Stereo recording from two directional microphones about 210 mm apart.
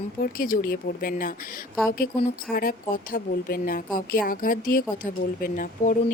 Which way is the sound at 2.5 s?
45° left (ahead or behind).